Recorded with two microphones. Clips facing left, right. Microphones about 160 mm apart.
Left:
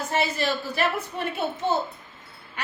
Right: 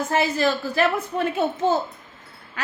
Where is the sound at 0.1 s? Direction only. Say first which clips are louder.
Right 4 dB; 90° right.